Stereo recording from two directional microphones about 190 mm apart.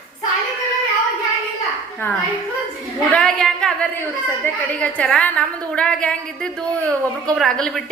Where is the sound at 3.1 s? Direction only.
5° left (ahead or behind).